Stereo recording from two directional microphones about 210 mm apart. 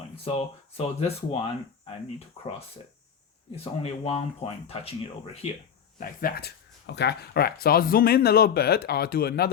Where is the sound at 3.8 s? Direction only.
30° left (ahead or behind).